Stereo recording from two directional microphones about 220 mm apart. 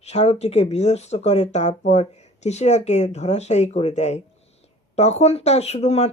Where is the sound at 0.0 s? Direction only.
30° left (ahead or behind).